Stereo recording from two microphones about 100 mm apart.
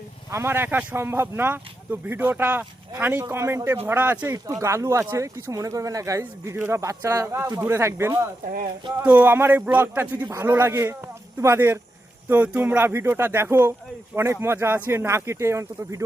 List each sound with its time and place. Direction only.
0.3 s speech: 25° right (ahead or behind)
3.2 s speech: 25° right (ahead or behind)
4.6 s speech: 30° right (ahead or behind)